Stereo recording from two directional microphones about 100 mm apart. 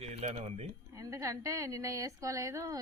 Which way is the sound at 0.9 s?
35° right (ahead or behind).